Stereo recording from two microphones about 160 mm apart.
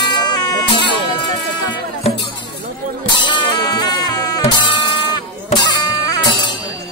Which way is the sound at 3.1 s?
30° left (ahead or behind).